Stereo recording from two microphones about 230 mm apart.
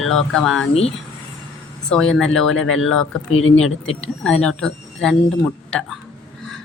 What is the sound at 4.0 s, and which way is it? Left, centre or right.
Speech, centre.